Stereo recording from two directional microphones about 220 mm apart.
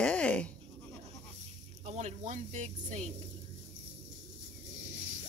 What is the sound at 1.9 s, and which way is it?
Speech, 35° right (ahead or behind).